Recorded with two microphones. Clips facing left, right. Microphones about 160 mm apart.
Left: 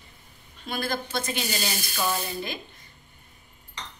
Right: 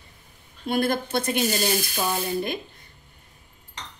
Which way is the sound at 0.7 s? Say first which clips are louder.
Right 6 dB; 55° right (ahead or behind).